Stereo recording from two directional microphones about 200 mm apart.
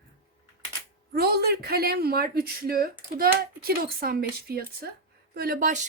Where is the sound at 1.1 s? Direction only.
55° right (ahead or behind).